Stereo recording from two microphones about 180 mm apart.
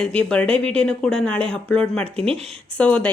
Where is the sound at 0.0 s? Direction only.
5° left (ahead or behind).